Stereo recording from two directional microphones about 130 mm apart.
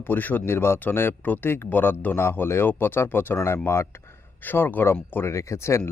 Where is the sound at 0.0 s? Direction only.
15° left (ahead or behind).